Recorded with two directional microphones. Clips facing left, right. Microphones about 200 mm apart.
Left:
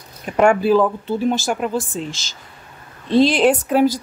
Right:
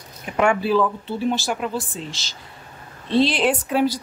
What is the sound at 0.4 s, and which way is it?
Speech, 45° left (ahead or behind).